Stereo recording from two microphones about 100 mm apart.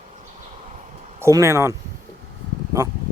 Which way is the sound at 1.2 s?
30° right (ahead or behind).